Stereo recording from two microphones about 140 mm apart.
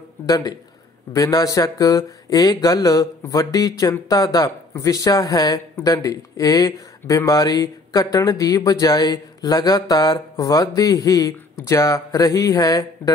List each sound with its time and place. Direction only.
0.3 s speech: 25° left (ahead or behind)